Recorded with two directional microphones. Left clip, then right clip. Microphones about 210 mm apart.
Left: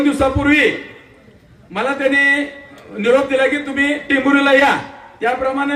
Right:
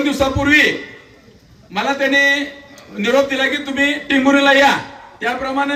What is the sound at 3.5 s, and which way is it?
A man's voice, 55° left (ahead or behind).